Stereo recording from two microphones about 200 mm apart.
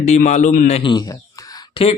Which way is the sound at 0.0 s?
35° left (ahead or behind).